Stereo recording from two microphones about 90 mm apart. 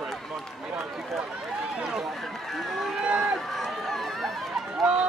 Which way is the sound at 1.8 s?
5° right (ahead or behind).